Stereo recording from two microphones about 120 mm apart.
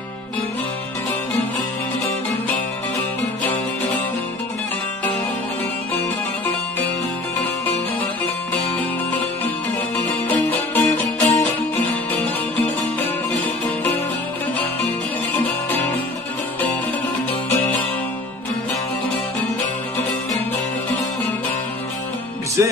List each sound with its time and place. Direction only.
10.0 s music: 15° left (ahead or behind)
22.6 s music: 20° right (ahead or behind)